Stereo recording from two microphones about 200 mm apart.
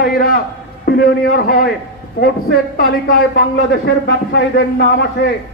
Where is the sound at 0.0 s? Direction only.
45° left (ahead or behind).